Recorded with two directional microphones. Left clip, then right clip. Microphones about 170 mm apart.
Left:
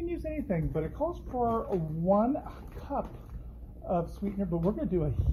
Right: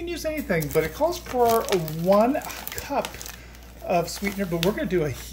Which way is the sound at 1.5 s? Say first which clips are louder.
Right 9 dB; 40° right (ahead or behind).